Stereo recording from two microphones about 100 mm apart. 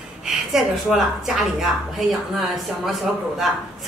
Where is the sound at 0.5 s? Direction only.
Centre (ahead or behind).